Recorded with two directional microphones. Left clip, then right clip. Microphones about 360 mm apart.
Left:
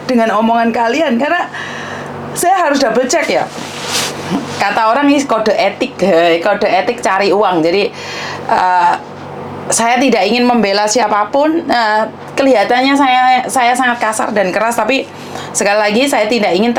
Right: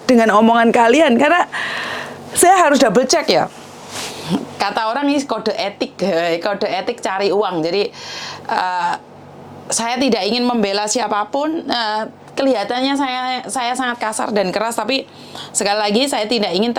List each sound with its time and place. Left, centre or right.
0.1 s a woman's voice: right
4.6 s a woman's voice: right